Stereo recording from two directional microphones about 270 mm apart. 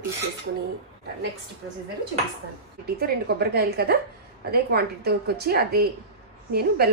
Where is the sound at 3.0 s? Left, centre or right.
Right.